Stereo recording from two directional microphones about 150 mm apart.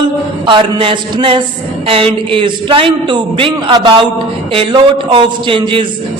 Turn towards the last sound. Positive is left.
turn(degrees=-35)  # may be behind; listen again after turning